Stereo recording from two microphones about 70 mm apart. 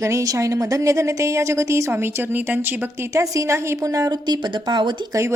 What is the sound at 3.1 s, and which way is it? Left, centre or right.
Speech, right.